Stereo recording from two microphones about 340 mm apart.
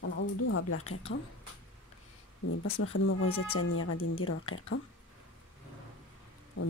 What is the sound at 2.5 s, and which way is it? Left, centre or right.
Speech, left.